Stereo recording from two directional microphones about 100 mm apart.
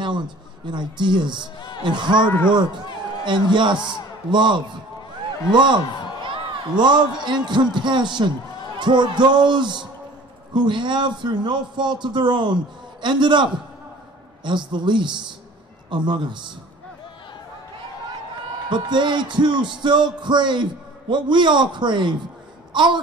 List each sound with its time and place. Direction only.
0.7 s a man's voice: 50° right (ahead or behind)
3.3 s a man's voice: 50° right (ahead or behind)
18.7 s a man's voice: 50° right (ahead or behind)
22.7 s a sound: 50° right (ahead or behind)